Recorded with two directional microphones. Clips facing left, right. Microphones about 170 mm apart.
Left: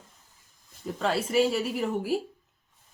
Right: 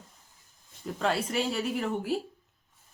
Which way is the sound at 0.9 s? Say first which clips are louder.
Left 4 dB; centre (ahead or behind).